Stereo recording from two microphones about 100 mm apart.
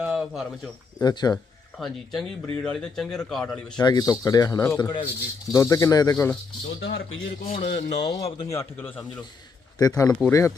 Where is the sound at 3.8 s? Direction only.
40° left (ahead or behind).